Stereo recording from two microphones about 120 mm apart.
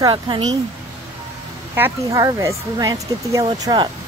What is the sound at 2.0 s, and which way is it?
Speech, 30° right (ahead or behind).